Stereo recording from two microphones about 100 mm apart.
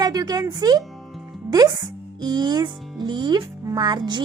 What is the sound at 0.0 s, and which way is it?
Speech, 40° right (ahead or behind).